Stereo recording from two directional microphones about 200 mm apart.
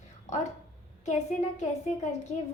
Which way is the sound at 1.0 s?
35° left (ahead or behind).